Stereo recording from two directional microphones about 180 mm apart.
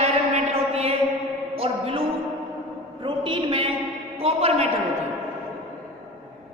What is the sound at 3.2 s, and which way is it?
Speech, 30° right (ahead or behind).